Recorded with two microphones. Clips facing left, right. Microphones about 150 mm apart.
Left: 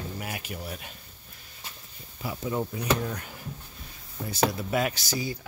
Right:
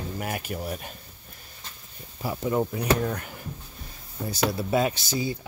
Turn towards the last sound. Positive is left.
turn(degrees=-25)  # may be behind; listen again after turning